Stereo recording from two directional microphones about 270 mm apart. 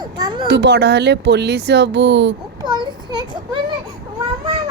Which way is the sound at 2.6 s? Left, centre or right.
Centre.